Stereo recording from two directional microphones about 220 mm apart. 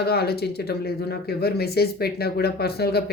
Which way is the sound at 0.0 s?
45° left (ahead or behind).